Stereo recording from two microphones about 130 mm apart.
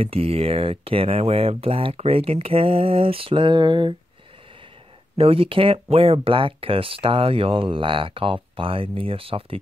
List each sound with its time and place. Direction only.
0.0 s speech: 50° right (ahead or behind)
5.1 s speech: 45° right (ahead or behind)